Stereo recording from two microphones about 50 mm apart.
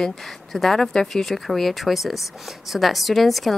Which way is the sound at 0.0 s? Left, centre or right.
Centre.